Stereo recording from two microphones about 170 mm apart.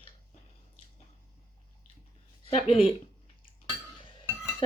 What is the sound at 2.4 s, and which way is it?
Speech, 35° left (ahead or behind).